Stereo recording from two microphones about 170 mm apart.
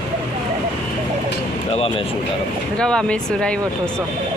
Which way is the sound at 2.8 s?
5° left (ahead or behind).